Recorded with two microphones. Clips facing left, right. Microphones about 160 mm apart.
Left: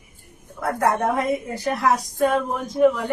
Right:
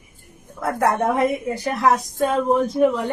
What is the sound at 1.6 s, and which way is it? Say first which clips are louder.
Speech: right 1 dB; 15° right (ahead or behind).